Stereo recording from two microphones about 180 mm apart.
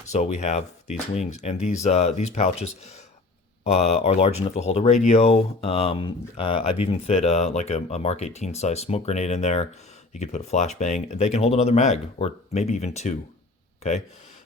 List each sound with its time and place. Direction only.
0.1 s speech: 40° left (ahead or behind)